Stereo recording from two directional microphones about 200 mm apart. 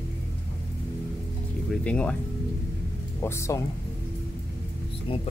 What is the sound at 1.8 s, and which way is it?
Speech, 5° left (ahead or behind).